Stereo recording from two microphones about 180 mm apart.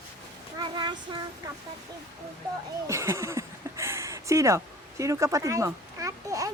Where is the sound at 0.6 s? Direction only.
25° right (ahead or behind).